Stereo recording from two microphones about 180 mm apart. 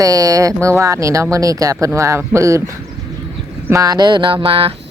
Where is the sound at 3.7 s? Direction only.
20° right (ahead or behind).